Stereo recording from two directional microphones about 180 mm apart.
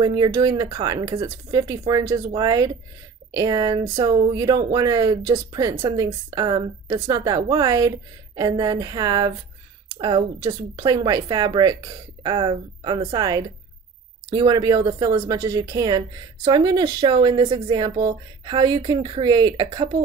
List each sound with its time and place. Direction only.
0.0 s speech: 20° right (ahead or behind)